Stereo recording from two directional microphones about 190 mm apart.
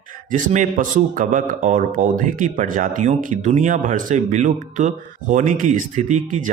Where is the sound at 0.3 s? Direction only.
45° right (ahead or behind).